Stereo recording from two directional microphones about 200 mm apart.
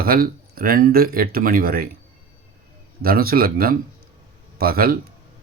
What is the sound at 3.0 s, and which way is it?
Speech, 50° right (ahead or behind).